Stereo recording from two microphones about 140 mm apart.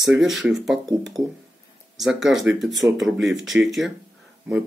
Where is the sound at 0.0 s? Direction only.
Centre (ahead or behind).